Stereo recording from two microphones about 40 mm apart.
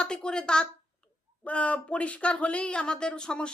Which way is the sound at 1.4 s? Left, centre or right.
Left.